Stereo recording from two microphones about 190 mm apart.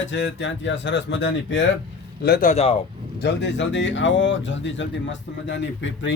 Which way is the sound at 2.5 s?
35° left (ahead or behind).